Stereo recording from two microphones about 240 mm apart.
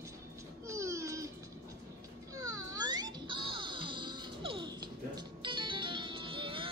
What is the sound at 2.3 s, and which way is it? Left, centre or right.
Music, centre.